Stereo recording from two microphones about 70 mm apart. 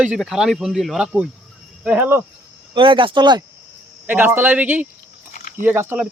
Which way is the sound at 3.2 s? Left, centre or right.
Right.